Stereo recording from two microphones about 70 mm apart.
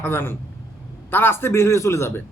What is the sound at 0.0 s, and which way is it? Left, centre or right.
Speech, left.